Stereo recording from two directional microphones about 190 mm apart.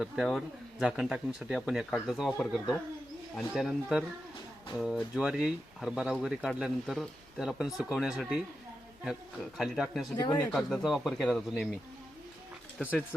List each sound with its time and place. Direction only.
0.0 s speech: centre (ahead or behind)
9.6 s speech: centre (ahead or behind)
10.2 s speech: 25° left (ahead or behind)
10.4 s speech: centre (ahead or behind)